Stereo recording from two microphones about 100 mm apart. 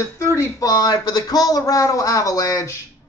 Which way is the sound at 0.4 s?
40° left (ahead or behind).